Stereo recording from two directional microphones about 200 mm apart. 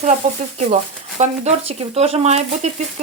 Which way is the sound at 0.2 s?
35° right (ahead or behind).